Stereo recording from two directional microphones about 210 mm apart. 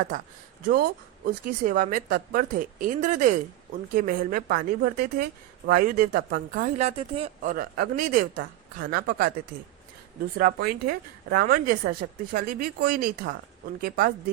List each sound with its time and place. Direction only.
0.7 s a woman's voice: 45° right (ahead or behind); by 7.5 s 30° right (ahead or behind)
7.5 s speech: 45° right (ahead or behind)
10.3 s speech: 45° right (ahead or behind)